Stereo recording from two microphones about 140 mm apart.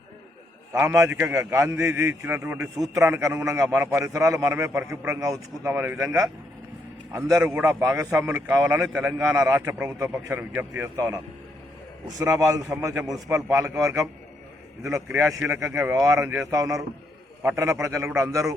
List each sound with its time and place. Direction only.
0.7 s a man's voice: 20° right (ahead or behind)
7.1 s a man's voice: 20° right (ahead or behind)